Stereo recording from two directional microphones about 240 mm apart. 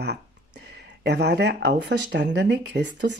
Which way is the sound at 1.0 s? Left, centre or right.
Right.